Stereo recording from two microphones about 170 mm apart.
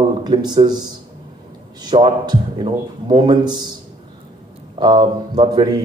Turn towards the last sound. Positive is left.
turn(degrees=-25)  # may be behind; listen again after turning